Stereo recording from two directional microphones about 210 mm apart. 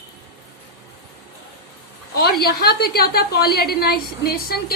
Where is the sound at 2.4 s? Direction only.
50° left (ahead or behind).